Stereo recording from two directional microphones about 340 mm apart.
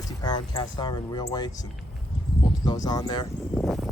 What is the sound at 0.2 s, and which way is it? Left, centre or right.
Speech, centre.